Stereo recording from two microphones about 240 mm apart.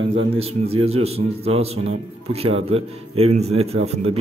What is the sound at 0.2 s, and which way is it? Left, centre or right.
Speech, right.